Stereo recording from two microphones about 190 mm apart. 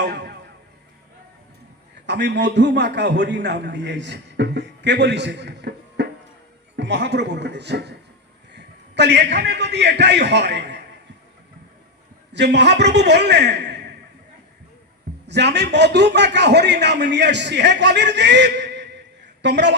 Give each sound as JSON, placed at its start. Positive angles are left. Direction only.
{"t": 0.0, "sound": "music", "side_deg": -65}
{"t": 2.0, "sound": "a man's voice", "side_deg": -65}
{"t": 12.3, "sound": "a man's voice", "side_deg": -65}
{"t": 15.3, "sound": "a man's voice", "side_deg": -65}